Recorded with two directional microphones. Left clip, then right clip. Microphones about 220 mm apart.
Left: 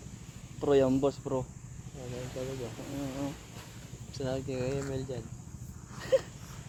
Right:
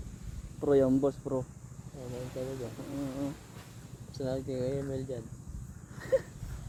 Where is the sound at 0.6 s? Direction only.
5° right (ahead or behind).